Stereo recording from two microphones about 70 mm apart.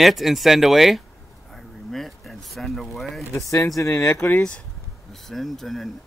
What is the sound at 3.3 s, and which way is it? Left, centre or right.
Speech, left.